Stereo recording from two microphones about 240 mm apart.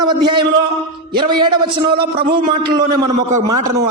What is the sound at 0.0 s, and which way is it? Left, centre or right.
A man's voice, centre.